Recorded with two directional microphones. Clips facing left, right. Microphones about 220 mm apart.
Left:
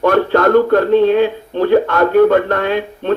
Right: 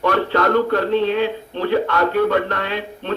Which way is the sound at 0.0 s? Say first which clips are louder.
Left 6 dB; 50° left (ahead or behind).